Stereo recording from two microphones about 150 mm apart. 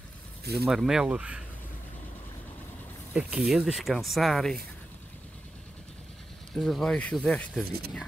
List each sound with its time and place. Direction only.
0.7 s speech: 5° right (ahead or behind)
3.1 s speech: 10° right (ahead or behind)
6.5 s speech: 5° left (ahead or behind)
7.6 s speech: 90° right